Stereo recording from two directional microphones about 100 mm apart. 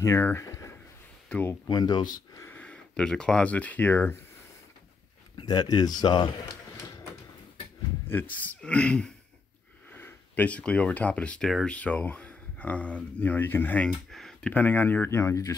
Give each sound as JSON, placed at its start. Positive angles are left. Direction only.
{"t": 0.0, "sound": "speech", "side_deg": 25}
{"t": 1.7, "sound": "speech", "side_deg": 45}
{"t": 2.5, "sound": "speech", "side_deg": 10}
{"t": 5.4, "sound": "speech", "side_deg": 40}
{"t": 8.1, "sound": "speech", "side_deg": 20}
{"t": 14.1, "sound": "a sound", "side_deg": 5}
{"t": 14.5, "sound": "speech", "side_deg": 15}